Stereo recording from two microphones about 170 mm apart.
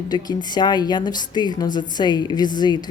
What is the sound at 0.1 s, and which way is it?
Speech, 25° left (ahead or behind).